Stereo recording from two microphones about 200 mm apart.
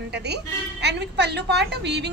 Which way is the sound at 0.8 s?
55° right (ahead or behind).